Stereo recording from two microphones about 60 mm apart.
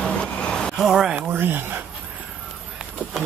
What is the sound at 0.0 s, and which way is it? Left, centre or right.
Vehicle, centre.